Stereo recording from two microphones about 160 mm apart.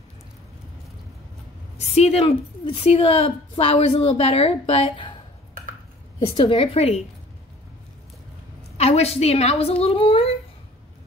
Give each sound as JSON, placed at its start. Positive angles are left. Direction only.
{"t": 1.8, "sound": "a woman's voice", "side_deg": 40}
{"t": 6.2, "sound": "a woman's voice", "side_deg": 35}
{"t": 8.7, "sound": "a woman's voice", "side_deg": 40}